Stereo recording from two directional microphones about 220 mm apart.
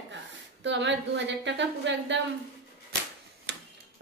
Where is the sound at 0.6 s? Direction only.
55° right (ahead or behind).